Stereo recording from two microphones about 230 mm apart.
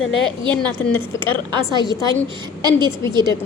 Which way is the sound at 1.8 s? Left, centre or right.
Centre.